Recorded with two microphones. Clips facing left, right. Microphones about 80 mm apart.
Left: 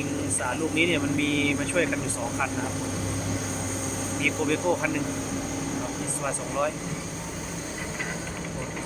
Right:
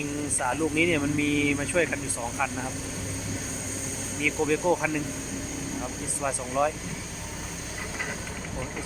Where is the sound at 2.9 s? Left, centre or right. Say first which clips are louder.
Left 5 dB; left.